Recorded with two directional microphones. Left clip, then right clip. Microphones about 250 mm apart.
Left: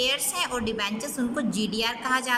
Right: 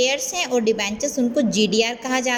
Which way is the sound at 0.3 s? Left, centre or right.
Centre.